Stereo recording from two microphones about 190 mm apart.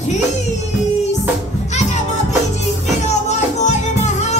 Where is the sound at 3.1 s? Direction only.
40° left (ahead or behind).